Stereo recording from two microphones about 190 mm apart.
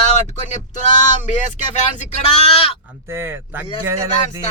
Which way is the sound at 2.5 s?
30° left (ahead or behind).